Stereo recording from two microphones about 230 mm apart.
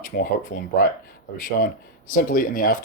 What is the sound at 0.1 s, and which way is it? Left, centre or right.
Speech, left.